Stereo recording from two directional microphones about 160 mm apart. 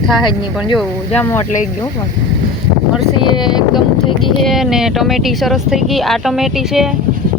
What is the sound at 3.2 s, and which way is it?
Speech, 30° left (ahead or behind).